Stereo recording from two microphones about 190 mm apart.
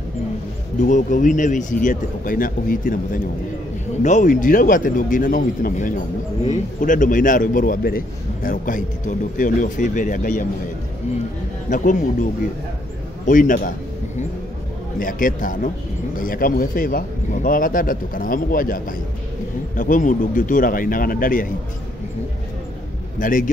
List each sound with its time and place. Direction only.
0.8 s a man's voice: 40° left (ahead or behind)
4.0 s a man's voice: 40° left (ahead or behind)
11.7 s a man's voice: 45° left (ahead or behind)
15.0 s a man's voice: 45° left (ahead or behind)
23.1 s a man's voice: 45° left (ahead or behind)